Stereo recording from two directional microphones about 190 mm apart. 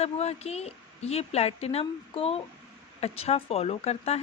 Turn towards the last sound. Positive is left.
turn(degrees=35)  # may be behind; listen again after turning